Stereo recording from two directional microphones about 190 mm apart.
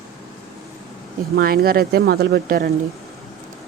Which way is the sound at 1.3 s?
55° right (ahead or behind).